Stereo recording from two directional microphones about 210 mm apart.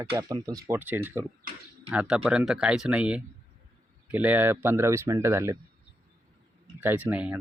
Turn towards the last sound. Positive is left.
turn(degrees=-10)  # may be behind; listen again after turning